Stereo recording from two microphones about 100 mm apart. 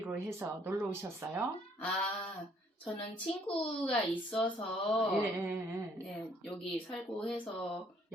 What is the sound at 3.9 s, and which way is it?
Speech, 5° left (ahead or behind).